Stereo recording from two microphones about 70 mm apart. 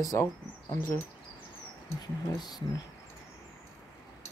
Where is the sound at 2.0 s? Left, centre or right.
Left.